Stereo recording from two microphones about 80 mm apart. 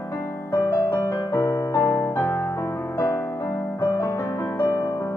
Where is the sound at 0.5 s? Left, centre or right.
Left.